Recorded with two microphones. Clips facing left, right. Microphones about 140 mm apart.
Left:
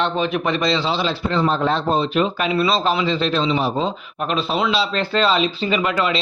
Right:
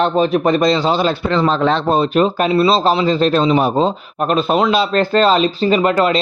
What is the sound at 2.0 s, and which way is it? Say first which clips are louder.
Speech: right 5 dB; 45° right (ahead or behind).